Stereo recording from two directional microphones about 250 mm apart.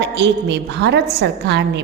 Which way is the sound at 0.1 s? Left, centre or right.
Right.